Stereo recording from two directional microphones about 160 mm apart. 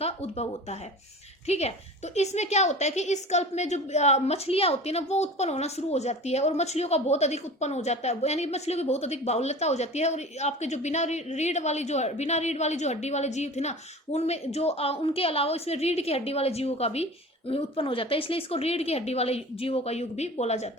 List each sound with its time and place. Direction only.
0.0 s a woman's voice: 40° left (ahead or behind)